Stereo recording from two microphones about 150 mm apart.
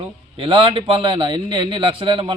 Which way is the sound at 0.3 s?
35° right (ahead or behind).